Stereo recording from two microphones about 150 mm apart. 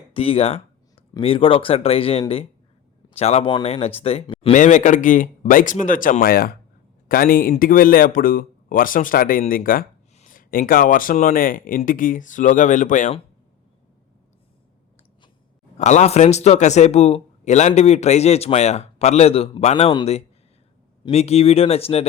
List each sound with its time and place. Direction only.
0.1 s a sound: 40° left (ahead or behind)
1.2 s speech: 35° left (ahead or behind)
4.5 s a man's voice: 55° left (ahead or behind); by 6.6 s 90° left
7.1 s a man's voice: 75° left (ahead or behind); by 13.1 s 55° left (ahead or behind)
15.8 s speech: 50° left (ahead or behind)
21.0 s speech: 45° left (ahead or behind)